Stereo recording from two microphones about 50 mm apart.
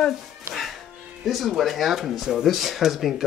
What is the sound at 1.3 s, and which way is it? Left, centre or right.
Speech, centre.